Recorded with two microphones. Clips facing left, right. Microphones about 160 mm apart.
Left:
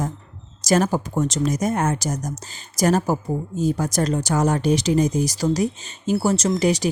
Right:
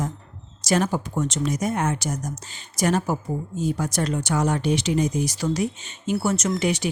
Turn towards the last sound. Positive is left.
turn(degrees=40)  # may be behind; listen again after turning